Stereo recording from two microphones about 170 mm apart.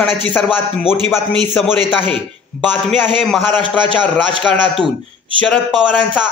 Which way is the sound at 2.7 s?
10° left (ahead or behind).